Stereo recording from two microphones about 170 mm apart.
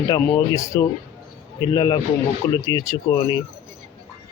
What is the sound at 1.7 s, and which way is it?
Speech, 25° left (ahead or behind).